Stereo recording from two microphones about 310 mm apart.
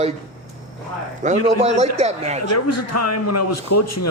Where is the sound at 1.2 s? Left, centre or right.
Right.